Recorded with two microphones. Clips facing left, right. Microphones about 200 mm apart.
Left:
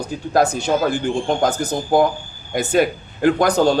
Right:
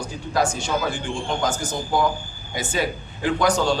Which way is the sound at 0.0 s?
60° left (ahead or behind).